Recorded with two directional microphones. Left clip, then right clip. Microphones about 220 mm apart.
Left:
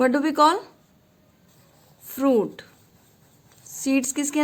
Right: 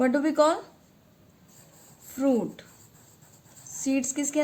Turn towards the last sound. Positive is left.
turn(degrees=40)  # may be behind; listen again after turning